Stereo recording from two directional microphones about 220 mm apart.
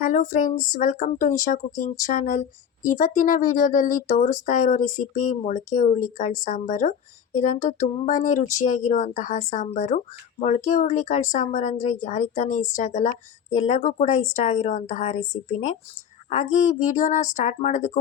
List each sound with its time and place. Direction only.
0.0 s speech: 35° left (ahead or behind)